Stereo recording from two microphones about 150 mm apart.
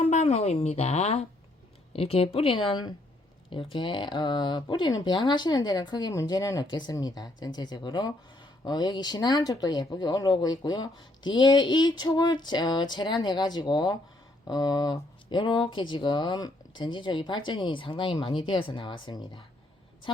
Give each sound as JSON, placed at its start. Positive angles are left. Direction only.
{"t": 0.0, "sound": "speech", "side_deg": 50}